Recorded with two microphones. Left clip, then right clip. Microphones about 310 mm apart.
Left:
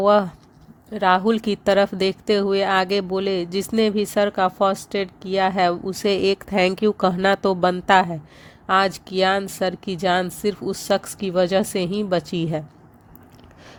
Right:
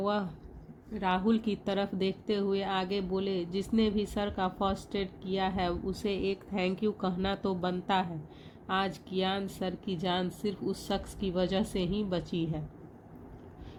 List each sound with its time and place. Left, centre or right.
0.0 s speech: left